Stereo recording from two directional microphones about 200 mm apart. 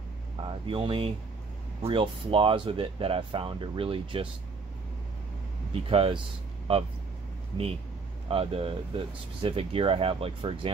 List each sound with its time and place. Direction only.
0.7 s speech: 25° right (ahead or behind)
5.9 s speech: 30° right (ahead or behind)
8.3 s speech: 30° right (ahead or behind)